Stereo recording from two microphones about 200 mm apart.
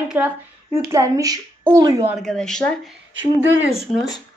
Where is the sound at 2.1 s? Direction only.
Centre (ahead or behind).